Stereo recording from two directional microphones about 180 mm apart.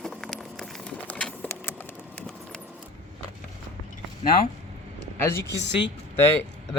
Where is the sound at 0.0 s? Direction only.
Centre (ahead or behind).